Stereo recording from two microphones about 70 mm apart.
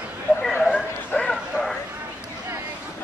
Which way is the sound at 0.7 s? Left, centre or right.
Centre.